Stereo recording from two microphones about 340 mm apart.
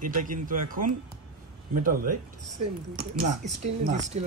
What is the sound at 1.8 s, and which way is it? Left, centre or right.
Speech, right.